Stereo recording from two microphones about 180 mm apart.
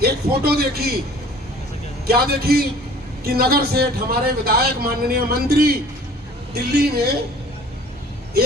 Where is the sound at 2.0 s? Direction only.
60° right (ahead or behind).